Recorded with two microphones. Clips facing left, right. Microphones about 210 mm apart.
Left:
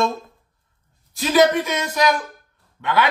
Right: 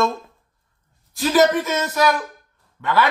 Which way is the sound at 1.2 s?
15° left (ahead or behind).